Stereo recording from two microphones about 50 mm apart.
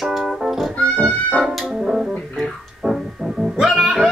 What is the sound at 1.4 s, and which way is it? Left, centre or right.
Brass instrument, centre.